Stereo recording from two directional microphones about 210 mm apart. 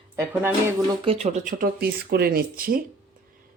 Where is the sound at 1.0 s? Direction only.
30° right (ahead or behind).